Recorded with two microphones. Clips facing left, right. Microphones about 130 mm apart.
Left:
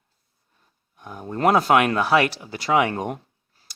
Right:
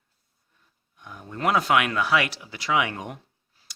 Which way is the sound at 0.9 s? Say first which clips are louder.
Left 7 dB; 40° left (ahead or behind).